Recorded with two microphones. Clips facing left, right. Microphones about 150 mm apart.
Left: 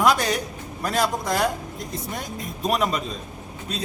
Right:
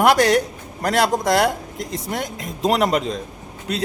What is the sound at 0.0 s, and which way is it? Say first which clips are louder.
A man's voice: right 6 dB; 70° right (ahead or behind).